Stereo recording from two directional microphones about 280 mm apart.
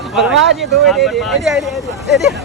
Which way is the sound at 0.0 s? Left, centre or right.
Centre.